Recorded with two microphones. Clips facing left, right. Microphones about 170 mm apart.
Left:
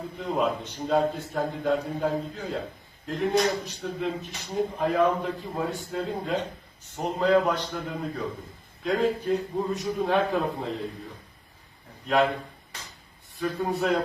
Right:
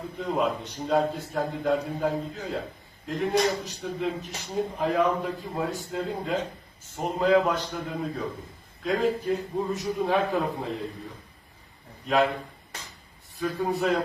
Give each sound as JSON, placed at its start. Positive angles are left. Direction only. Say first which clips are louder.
{"t": 0.2, "sound": "a man's voice", "louder": "even", "side_deg": 0}
{"t": 12.0, "sound": "a man's voice", "louder": "even", "side_deg": 0}
{"t": 13.4, "sound": "a man's voice", "louder": "even", "side_deg": 0}